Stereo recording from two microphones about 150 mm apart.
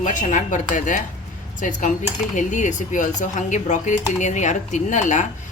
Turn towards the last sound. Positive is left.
turn(degrees=55)  # may be behind; listen again after turning